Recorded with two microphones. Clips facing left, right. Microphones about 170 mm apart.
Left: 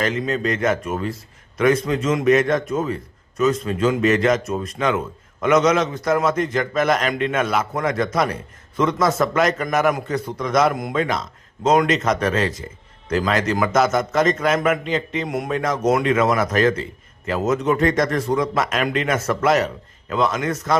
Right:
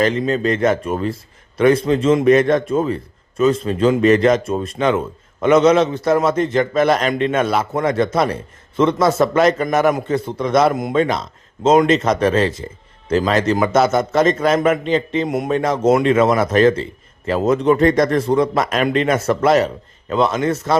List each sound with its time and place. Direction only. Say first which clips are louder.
0.0 s a man's voice: right 5 dB; 30° right (ahead or behind)